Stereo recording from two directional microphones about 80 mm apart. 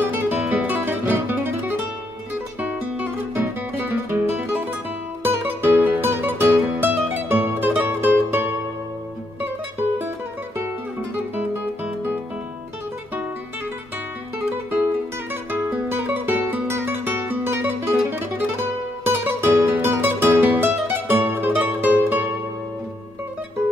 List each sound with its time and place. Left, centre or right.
0.0 s music: right
11.3 s music: right
15.5 s music: right